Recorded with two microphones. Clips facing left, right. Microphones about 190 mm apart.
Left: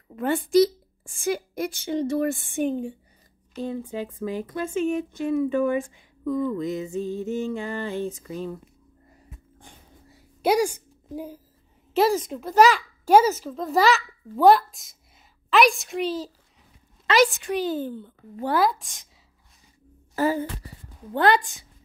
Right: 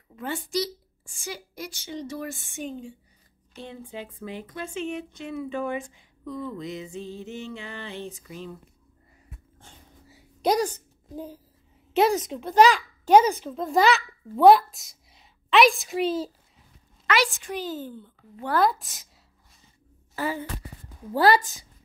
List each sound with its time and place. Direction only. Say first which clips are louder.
0.1 s a woman's voice: left 9 dB; 55° left (ahead or behind)
3.5 s speech: left 8 dB; 40° left (ahead or behind)
10.0 s a sound: left 1 dB; centre (ahead or behind)
10.5 s a woman's voice: left 3 dB; 10° left (ahead or behind)
11.9 s a child's voice: left 1 dB; centre (ahead or behind)
17.3 s a woman's voice: left 6 dB; 65° left (ahead or behind)
18.6 s a woman's voice: right 2 dB; centre (ahead or behind)
20.2 s speech: left 6 dB; 40° left (ahead or behind)
21.1 s a woman's voice: even; 5° right (ahead or behind)